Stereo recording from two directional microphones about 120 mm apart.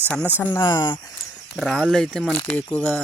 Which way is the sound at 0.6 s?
35° left (ahead or behind).